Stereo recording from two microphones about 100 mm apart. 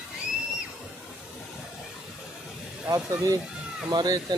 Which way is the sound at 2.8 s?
30° right (ahead or behind).